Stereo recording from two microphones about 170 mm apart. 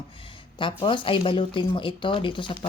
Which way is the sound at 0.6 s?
30° left (ahead or behind).